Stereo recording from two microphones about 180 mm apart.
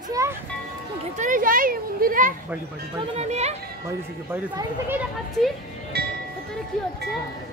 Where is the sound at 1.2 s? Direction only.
50° right (ahead or behind).